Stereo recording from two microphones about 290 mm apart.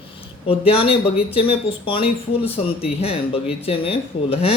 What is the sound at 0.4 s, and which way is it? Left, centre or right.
Speech, centre.